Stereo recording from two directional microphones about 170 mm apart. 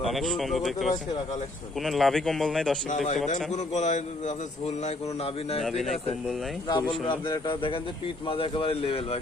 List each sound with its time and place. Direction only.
0.0 s speech: centre (ahead or behind)
3.2 s a man's voice: 45° left (ahead or behind)
5.6 s speech: centre (ahead or behind)
6.7 s a man's voice: 30° left (ahead or behind)